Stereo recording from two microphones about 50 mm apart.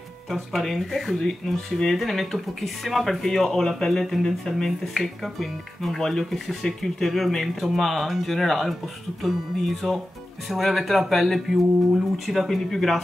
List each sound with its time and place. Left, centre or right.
0.3 s speech: centre